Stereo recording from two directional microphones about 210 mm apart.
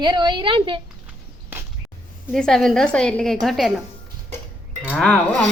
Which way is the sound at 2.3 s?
Centre (ahead or behind).